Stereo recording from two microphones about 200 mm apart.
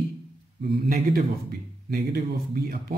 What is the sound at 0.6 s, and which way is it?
Speech, 50° right (ahead or behind).